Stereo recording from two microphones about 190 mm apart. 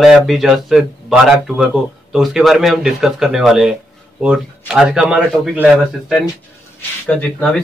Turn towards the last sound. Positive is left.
turn(degrees=5)  # may be behind; listen again after turning